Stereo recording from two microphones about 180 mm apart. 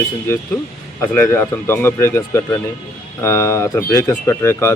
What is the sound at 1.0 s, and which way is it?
Speech, 10° left (ahead or behind).